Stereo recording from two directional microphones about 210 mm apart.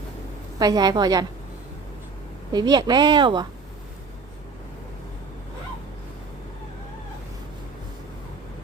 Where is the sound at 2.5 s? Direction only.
20° right (ahead or behind).